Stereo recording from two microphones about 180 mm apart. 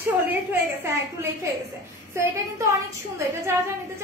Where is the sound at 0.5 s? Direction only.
15° right (ahead or behind).